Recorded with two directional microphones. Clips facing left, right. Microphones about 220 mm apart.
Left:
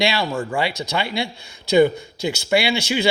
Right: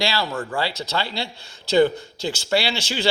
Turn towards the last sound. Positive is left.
turn(degrees=10)  # may be behind; listen again after turning